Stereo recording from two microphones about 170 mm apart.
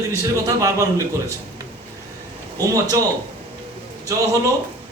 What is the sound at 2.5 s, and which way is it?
Speech, 20° right (ahead or behind).